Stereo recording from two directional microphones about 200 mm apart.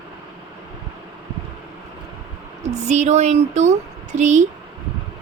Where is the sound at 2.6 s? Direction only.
35° right (ahead or behind).